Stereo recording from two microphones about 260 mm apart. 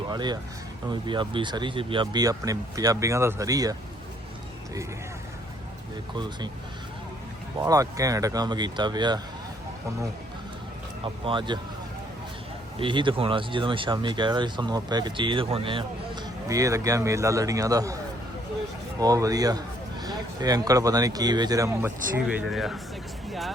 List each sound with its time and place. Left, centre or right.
0.1 s a man's voice: centre
7.6 s a man's voice: centre
11.0 s speech: centre
12.8 s a man's voice: centre
18.9 s a man's voice: centre